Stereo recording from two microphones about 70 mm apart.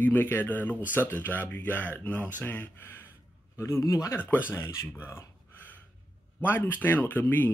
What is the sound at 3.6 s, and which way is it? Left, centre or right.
Speech, left.